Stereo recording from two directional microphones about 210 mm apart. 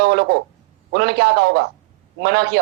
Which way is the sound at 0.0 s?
50° right (ahead or behind).